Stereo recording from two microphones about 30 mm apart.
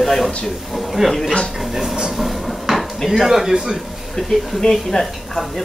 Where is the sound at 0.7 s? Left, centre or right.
Centre.